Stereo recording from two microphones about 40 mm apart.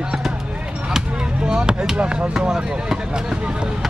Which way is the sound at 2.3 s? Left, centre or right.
Centre.